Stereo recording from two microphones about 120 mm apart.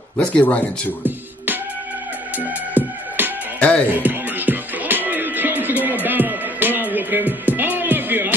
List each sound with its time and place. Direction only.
0.2 s speech: 10° left (ahead or behind)
1.0 s music: 15° right (ahead or behind)
2.8 s music: 15° right (ahead or behind)
3.5 s speech: 10° left (ahead or behind)
3.9 s music: 15° right (ahead or behind)